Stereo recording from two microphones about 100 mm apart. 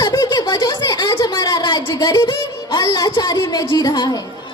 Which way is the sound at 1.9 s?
40° left (ahead or behind).